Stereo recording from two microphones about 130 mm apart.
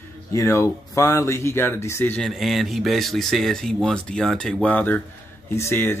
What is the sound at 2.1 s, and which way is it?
Speech, centre (ahead or behind).